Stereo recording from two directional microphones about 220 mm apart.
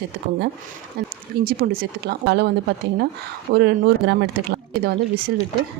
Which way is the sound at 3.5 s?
50° right (ahead or behind).